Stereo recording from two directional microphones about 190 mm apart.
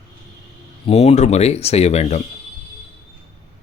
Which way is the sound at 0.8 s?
35° left (ahead or behind).